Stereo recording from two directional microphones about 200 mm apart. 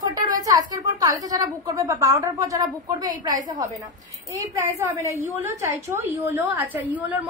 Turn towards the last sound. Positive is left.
turn(degrees=-10)  # may be behind; listen again after turning